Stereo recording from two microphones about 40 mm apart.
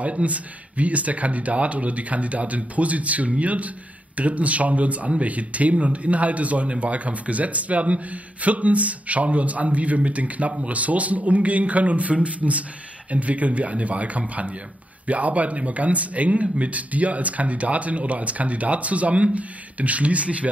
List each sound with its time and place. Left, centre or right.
0.0 s a man's voice: right